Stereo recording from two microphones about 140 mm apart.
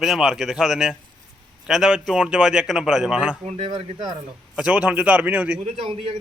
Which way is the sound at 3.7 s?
35° right (ahead or behind).